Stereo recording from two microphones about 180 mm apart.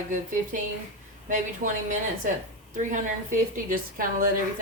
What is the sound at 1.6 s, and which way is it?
A woman's voice, 45° right (ahead or behind).